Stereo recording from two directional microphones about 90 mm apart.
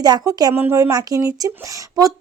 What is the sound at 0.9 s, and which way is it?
Speech, 40° right (ahead or behind).